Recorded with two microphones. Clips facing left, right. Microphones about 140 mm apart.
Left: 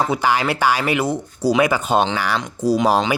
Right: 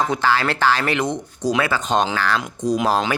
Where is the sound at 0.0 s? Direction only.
10° left (ahead or behind).